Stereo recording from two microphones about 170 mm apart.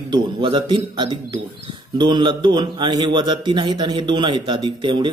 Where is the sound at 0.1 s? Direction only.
30° right (ahead or behind).